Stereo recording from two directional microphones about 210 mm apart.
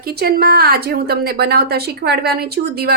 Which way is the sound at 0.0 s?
45° right (ahead or behind).